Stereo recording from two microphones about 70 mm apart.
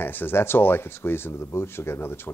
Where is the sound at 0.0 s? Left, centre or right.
Left.